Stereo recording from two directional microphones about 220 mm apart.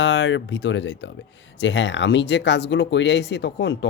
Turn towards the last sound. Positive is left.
turn(degrees=50)  # may be behind; listen again after turning